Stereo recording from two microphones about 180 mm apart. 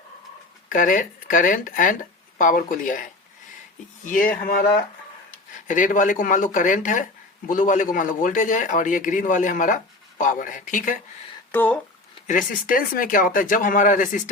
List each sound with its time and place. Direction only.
0.7 s speech: 50° left (ahead or behind)
5.6 s speech: 45° left (ahead or behind)
11.5 s speech: 10° left (ahead or behind)
12.3 s speech: 50° left (ahead or behind)